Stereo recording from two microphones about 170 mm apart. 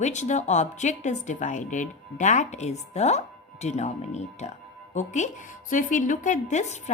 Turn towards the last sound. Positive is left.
turn(degrees=45)  # may be behind; listen again after turning